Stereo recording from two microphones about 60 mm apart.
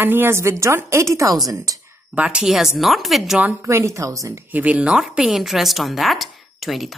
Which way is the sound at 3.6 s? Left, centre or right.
Right.